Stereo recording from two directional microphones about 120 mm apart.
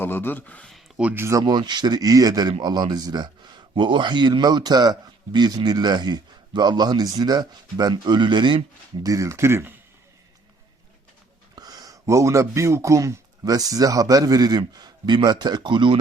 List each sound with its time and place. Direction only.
0.0 s speech: 15° left (ahead or behind)
0.7 s a sound: 5° right (ahead or behind)
1.1 s speech: 25° right (ahead or behind)
1.5 s speech: 40° right (ahead or behind)
9.0 s speech: 25° right (ahead or behind)
11.5 s speech: 30° right (ahead or behind)